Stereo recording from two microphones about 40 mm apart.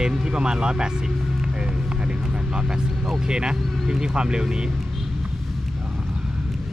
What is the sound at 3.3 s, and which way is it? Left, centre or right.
Speech, right.